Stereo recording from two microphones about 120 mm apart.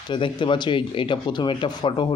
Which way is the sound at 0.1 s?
40° left (ahead or behind).